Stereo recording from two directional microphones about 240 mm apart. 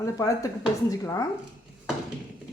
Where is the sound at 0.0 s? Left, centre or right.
Centre.